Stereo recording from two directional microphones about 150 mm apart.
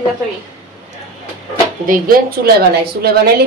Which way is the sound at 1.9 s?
70° right (ahead or behind).